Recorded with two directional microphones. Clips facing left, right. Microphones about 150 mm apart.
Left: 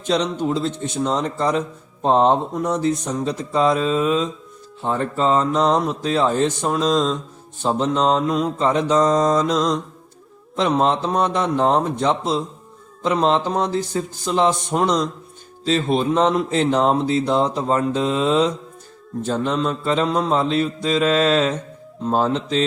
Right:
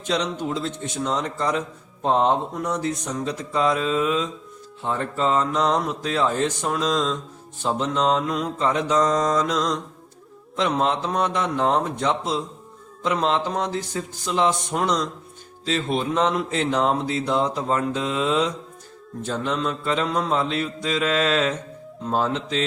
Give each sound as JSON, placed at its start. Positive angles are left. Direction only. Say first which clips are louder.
{"t": 0.0, "sound": "speech", "louder": "left 4 dB", "side_deg": 30}
{"t": 4.8, "sound": "mantra", "louder": "left 3 dB", "side_deg": 35}
{"t": 10.6, "sound": "speech", "louder": "left 4 dB", "side_deg": 30}